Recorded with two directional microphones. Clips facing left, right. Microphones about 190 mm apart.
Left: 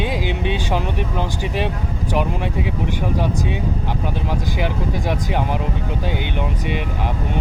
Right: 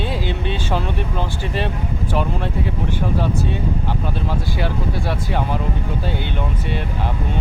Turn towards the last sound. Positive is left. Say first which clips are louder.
# left 1 dB
turn(degrees=15)  # may be behind; listen again after turning